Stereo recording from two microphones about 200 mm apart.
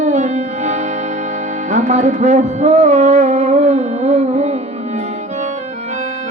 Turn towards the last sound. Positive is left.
turn(degrees=-35)  # may be behind; listen again after turning